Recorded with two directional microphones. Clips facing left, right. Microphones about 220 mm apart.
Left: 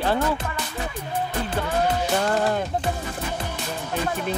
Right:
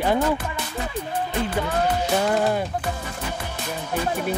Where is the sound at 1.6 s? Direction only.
5° right (ahead or behind).